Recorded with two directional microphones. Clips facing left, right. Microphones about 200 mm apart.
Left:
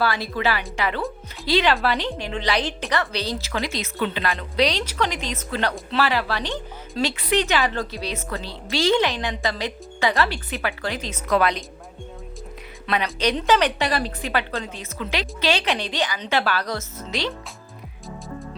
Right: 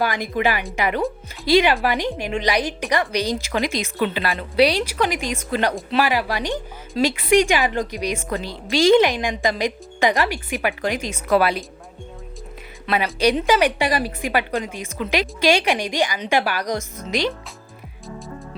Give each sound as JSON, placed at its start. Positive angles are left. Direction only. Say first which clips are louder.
{"t": 0.0, "sound": "speech", "louder": "right 2 dB", "side_deg": -15}
{"t": 12.9, "sound": "speech", "louder": "right 4 dB", "side_deg": -5}